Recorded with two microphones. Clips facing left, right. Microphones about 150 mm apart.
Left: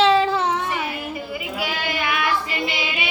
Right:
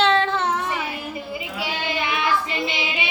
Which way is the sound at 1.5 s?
25° right (ahead or behind).